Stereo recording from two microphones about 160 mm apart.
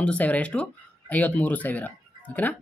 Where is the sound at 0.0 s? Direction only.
10° left (ahead or behind).